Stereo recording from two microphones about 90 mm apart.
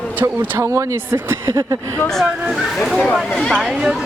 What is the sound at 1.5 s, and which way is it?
Speech, 40° right (ahead or behind).